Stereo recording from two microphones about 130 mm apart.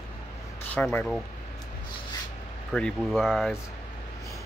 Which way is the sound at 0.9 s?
5° left (ahead or behind).